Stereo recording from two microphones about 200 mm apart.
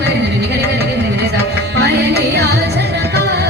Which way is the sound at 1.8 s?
55° right (ahead or behind).